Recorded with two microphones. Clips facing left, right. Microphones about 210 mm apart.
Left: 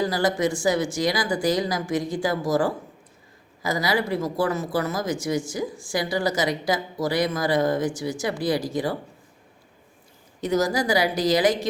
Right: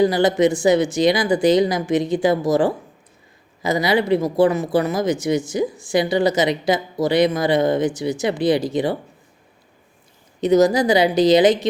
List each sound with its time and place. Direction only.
0.0 s speech: 20° right (ahead or behind)
10.4 s speech: 20° right (ahead or behind)